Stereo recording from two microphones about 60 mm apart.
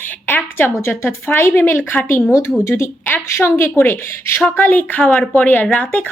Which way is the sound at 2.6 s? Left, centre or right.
Left.